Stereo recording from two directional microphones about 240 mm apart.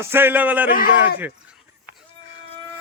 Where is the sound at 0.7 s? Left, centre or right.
Left.